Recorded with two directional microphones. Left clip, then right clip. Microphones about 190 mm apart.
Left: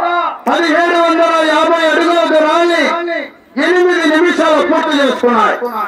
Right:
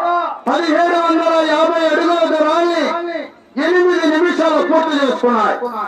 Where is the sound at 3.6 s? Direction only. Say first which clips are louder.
Left 4 dB; 45° left (ahead or behind).